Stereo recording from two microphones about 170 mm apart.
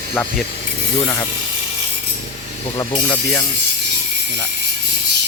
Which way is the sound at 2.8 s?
25° left (ahead or behind).